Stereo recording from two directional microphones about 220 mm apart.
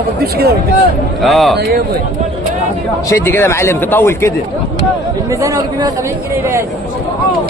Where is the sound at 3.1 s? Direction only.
10° left (ahead or behind).